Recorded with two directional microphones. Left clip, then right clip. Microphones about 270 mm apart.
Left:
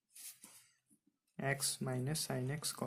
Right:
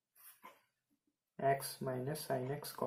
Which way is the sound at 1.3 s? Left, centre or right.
Left.